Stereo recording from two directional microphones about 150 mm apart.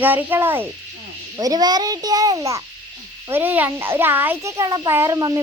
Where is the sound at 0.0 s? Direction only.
10° right (ahead or behind).